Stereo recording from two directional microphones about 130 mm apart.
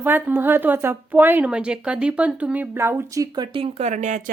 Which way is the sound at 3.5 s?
50° right (ahead or behind).